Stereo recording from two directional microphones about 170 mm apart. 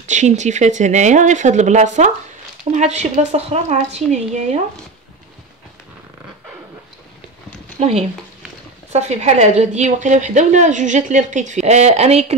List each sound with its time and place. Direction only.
0.0 s a woman's voice: 45° right (ahead or behind)
7.8 s a woman's voice: 40° right (ahead or behind)